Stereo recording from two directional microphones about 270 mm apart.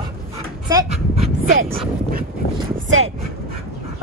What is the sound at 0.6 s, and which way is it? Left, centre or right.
Speech, centre.